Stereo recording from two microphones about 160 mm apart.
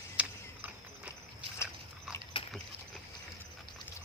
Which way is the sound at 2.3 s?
35° left (ahead or behind).